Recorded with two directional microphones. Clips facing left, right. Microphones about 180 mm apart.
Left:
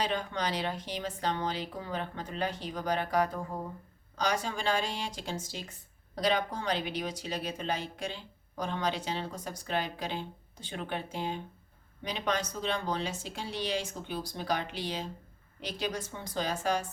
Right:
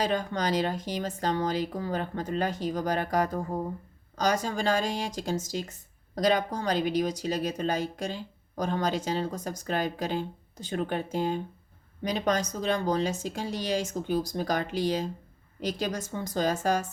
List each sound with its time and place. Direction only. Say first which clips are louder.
0.0 s speech: right 4 dB; 45° right (ahead or behind)